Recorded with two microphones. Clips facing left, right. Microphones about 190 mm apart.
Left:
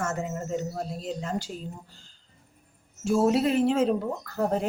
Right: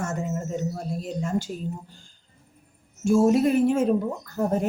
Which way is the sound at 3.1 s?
45° right (ahead or behind).